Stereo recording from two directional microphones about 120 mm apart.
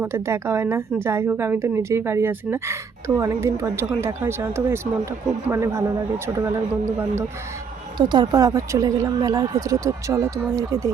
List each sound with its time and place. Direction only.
0.0 s a woman's voice: 20° right (ahead or behind)
7.9 s a woman's voice: 40° right (ahead or behind)